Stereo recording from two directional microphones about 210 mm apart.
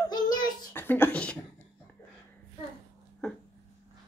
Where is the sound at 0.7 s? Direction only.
10° left (ahead or behind).